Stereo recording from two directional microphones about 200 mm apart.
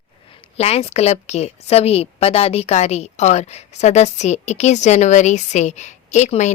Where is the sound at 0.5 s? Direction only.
30° left (ahead or behind).